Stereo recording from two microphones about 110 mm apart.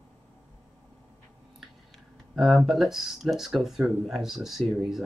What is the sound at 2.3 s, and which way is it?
Speech, 5° right (ahead or behind).